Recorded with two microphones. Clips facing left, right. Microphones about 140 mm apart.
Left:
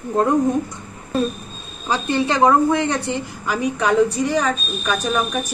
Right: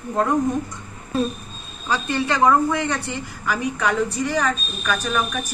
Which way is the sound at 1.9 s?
25° left (ahead or behind).